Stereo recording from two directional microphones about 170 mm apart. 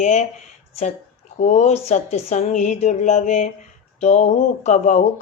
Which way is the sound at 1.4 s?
40° left (ahead or behind).